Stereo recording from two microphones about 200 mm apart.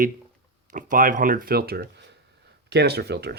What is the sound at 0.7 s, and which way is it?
Speech, 40° right (ahead or behind).